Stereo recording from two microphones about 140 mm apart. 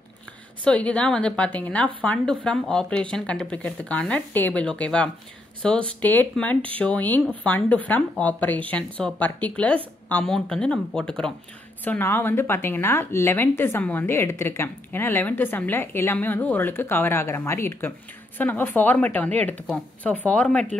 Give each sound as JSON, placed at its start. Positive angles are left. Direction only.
{"t": 0.7, "sound": "a woman's voice", "side_deg": 10}